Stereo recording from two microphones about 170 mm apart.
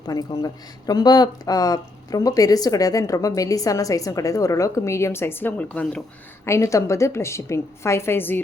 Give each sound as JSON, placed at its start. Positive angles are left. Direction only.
{"t": 0.1, "sound": "a woman's voice", "side_deg": 20}